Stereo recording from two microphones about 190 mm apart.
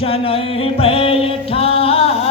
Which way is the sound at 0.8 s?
30° left (ahead or behind).